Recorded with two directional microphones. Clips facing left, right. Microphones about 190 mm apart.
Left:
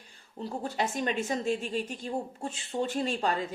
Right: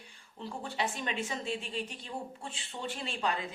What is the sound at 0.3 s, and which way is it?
A man's voice, 40° left (ahead or behind).